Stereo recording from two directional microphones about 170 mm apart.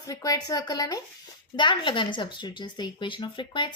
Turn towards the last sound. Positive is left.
turn(degrees=30)  # may be behind; listen again after turning